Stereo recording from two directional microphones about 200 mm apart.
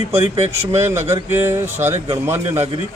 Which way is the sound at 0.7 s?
15° right (ahead or behind).